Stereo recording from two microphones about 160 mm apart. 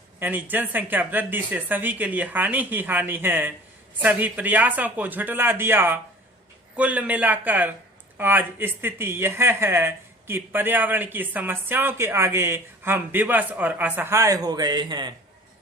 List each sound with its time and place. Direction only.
0.2 s speech: 10° right (ahead or behind); by 15.1 s 25° right (ahead or behind)